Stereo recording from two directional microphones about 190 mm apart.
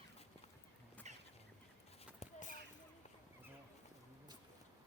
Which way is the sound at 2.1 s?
40° left (ahead or behind).